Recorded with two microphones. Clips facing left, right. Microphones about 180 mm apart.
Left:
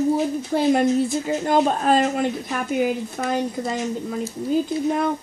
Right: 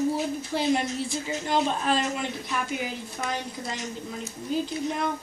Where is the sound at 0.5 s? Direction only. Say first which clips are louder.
Left 8 dB; 50° left (ahead or behind).